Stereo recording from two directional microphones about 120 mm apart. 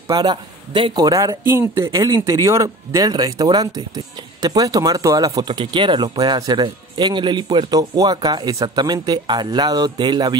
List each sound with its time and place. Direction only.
0.1 s a man's voice: 35° right (ahead or behind)
2.0 s speech: 35° right (ahead or behind)
5.5 s speech: 45° right (ahead or behind)